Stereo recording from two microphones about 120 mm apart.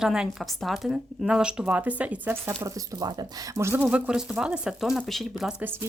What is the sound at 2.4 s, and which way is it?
Speech, 25° right (ahead or behind).